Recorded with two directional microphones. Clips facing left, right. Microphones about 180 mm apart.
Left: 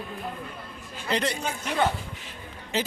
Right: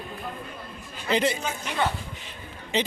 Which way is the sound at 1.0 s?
Centre (ahead or behind).